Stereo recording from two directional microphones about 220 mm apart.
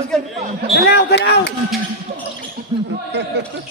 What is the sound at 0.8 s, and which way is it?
Speech, 50° left (ahead or behind).